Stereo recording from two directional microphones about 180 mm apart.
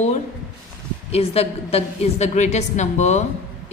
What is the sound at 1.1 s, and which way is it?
A woman's voice, 35° left (ahead or behind).